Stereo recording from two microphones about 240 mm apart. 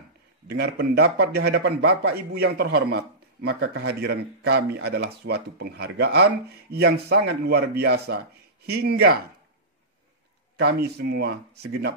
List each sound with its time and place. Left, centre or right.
0.5 s speech: right
10.6 s speech: right